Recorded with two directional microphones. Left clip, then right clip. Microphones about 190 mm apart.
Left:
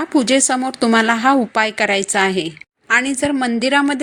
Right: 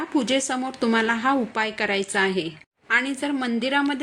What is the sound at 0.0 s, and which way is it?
A woman's voice, 40° left (ahead or behind).